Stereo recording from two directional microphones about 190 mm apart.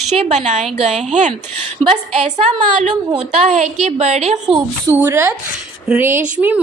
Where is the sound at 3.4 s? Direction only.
35° right (ahead or behind).